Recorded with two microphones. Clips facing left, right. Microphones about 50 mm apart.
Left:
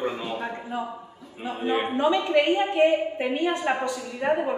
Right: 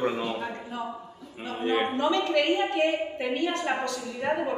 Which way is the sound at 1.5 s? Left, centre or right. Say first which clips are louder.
Left 1 dB; centre.